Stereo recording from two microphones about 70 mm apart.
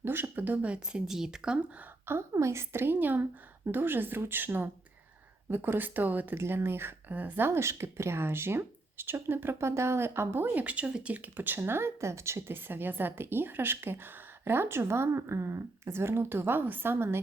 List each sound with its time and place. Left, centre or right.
0.0 s a woman's voice: right
1.0 s speech: centre
2.3 s speech: right
6.3 s speech: right